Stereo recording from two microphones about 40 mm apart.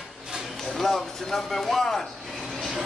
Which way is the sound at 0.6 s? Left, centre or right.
Centre.